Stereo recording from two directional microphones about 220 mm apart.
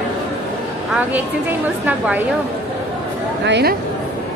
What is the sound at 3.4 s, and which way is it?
Speech, 50° right (ahead or behind).